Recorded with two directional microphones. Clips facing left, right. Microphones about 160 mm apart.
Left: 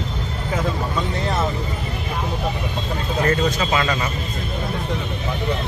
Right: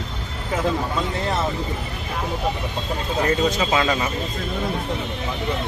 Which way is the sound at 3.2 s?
20° right (ahead or behind).